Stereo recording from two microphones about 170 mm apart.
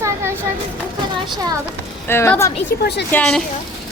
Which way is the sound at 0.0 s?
15° right (ahead or behind).